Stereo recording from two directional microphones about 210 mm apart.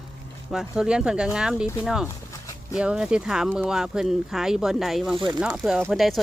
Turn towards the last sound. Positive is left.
turn(degrees=0)  # may be behind; listen again after turning